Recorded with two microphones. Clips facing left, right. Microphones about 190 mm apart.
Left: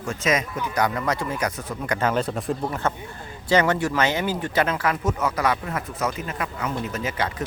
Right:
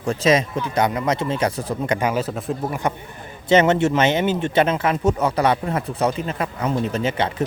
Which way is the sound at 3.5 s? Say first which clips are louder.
Right 5 dB; 25° right (ahead or behind).